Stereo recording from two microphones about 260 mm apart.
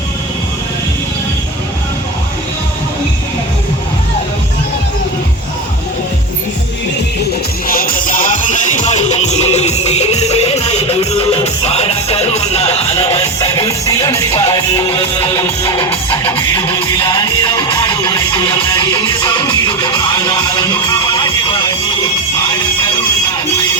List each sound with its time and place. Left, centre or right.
7.7 s music: left; by 21.2 s centre